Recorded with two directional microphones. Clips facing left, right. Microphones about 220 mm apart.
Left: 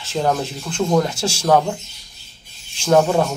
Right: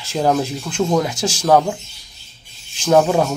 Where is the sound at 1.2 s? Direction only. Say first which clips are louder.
Right 1 dB; 10° left (ahead or behind).